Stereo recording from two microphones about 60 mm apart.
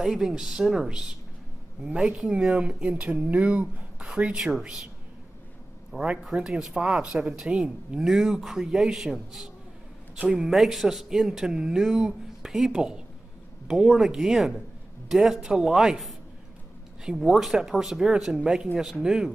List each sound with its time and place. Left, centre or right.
0.0 s a man's voice: centre
4.6 s a man's voice: centre
5.9 s a man's voice: centre
10.1 s speech: right
10.4 s a man's voice: centre